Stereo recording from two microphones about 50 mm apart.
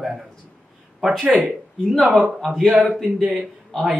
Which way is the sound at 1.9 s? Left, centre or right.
Centre.